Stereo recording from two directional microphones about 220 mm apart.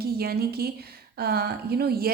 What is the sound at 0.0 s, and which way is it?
A woman's voice, 45° right (ahead or behind).